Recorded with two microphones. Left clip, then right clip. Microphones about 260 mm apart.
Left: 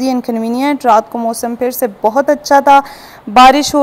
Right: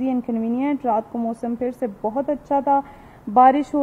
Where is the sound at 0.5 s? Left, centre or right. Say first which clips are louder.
Left 12 dB; left.